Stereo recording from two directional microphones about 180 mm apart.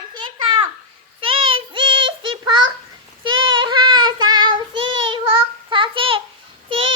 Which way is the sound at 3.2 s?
90° right.